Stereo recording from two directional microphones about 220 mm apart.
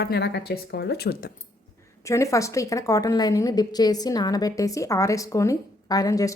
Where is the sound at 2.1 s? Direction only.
15° left (ahead or behind).